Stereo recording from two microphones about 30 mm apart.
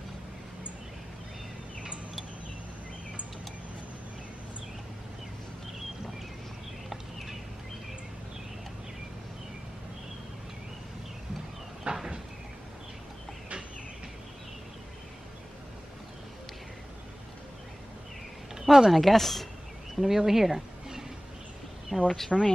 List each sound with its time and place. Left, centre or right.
11.9 s vehicle: right
18.5 s a sound: centre
18.9 s speech: centre
20.0 s speech: centre
22.3 s speech: centre